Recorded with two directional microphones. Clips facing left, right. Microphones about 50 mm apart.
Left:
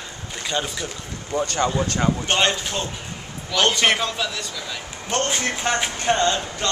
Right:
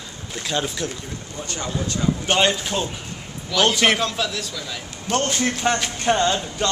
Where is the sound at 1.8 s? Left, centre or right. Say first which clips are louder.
Left 3 dB; left.